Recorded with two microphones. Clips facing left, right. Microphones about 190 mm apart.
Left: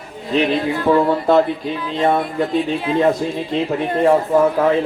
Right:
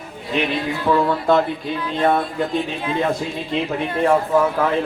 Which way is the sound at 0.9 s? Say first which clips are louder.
Left 3 dB; 20° left (ahead or behind).